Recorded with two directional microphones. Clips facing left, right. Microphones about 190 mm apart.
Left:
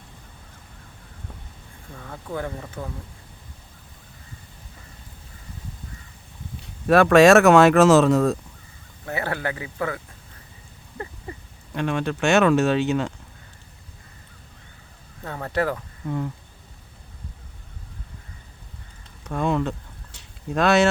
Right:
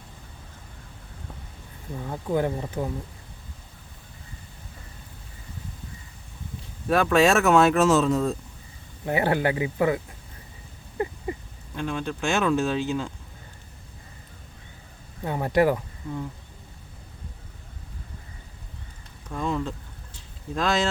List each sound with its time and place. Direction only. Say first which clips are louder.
2.0 s speech: right 6 dB; 20° right (ahead or behind)
6.8 s speech: left 6 dB; 75° left (ahead or behind)
9.0 s speech: right 5 dB; 15° right (ahead or behind)
10.9 s a sound: right 7 dB; 20° right (ahead or behind)
11.7 s speech: left 4 dB; 70° left (ahead or behind)
15.2 s speech: right 4 dB; 15° right (ahead or behind)
19.3 s speech: left 5 dB; 70° left (ahead or behind)
20.1 s a sound: left 5 dB; 70° left (ahead or behind)